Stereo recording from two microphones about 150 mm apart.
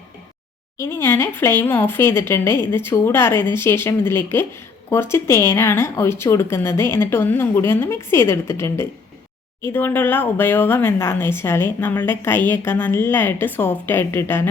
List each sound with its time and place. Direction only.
0.8 s speech: 15° left (ahead or behind)